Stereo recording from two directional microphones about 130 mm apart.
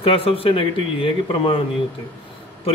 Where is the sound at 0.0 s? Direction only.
45° left (ahead or behind).